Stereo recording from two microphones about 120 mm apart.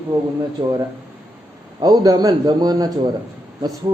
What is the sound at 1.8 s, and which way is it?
A man's voice, 35° right (ahead or behind).